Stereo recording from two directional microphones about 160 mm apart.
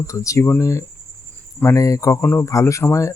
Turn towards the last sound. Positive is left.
turn(degrees=15)  # may be behind; listen again after turning